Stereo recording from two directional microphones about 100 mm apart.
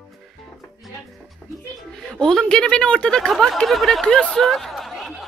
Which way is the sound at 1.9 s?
5° left (ahead or behind).